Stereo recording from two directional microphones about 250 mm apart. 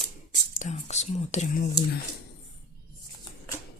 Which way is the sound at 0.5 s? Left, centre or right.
Left.